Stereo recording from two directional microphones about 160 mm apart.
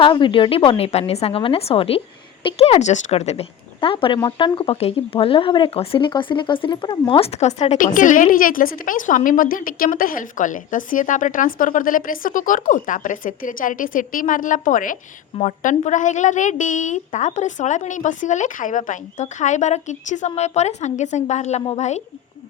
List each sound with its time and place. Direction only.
0.0 s a woman's voice: 30° left (ahead or behind)